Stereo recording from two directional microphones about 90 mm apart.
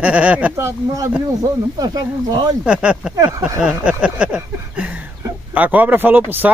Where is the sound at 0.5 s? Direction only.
35° right (ahead or behind).